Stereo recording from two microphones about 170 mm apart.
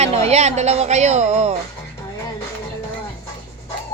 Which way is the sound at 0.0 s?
40° right (ahead or behind).